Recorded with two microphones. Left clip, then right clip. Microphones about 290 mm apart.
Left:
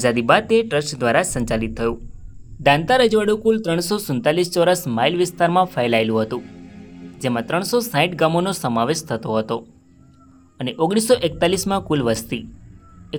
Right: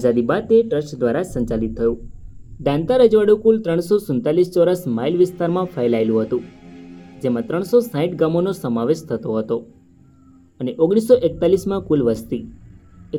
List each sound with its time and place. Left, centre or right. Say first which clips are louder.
0.0 s speech: left 2 dB; left
7.4 s speech: right 5 dB; left